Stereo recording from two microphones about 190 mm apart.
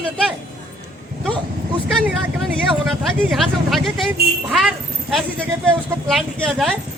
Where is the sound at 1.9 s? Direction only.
Centre (ahead or behind).